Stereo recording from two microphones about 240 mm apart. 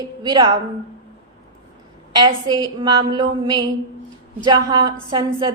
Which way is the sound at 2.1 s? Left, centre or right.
Centre.